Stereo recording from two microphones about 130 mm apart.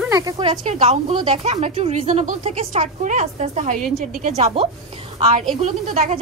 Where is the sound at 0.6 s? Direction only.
60° right (ahead or behind).